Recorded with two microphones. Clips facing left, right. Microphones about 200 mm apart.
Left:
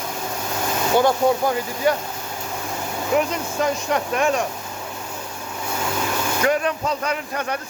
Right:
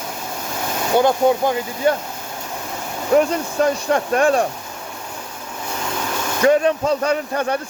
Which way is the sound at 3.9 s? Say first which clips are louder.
Right 5 dB; 35° right (ahead or behind).